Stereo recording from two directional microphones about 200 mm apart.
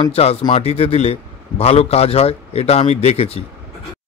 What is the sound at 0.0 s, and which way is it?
A man's voice, 30° left (ahead or behind).